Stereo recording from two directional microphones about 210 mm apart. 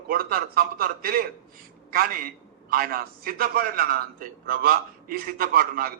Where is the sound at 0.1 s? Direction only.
45° right (ahead or behind).